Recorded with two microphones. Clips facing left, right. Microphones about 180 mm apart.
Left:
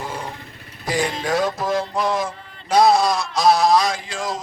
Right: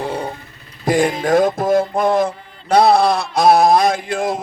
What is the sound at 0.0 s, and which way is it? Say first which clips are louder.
Vehicle: right 7 dB; 60° right (ahead or behind).